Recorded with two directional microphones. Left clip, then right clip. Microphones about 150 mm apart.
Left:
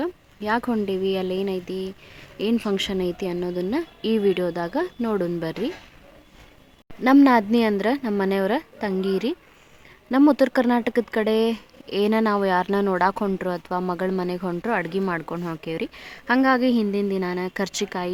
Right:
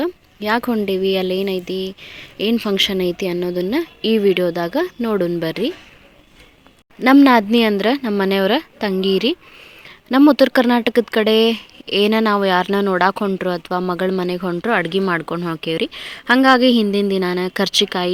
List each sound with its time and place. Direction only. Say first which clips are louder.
0.0 s a sound: right 6 dB; 25° right (ahead or behind)
0.9 s speech: right 6 dB; 25° right (ahead or behind)
7.2 s speech: right 4 dB; 20° right (ahead or behind)